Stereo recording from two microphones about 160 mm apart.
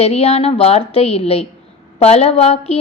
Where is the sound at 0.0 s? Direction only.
40° left (ahead or behind).